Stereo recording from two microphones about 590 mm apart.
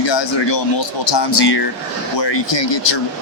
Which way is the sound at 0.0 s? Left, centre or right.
Left.